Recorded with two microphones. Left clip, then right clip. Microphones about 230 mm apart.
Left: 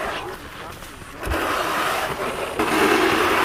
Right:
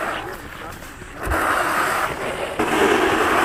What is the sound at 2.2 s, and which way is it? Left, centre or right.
Vehicle, left.